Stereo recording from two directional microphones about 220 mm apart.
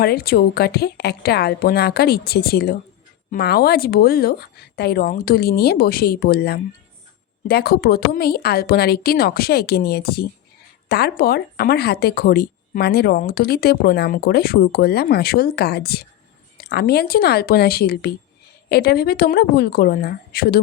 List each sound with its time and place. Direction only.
0.0 s speech: 45° left (ahead or behind)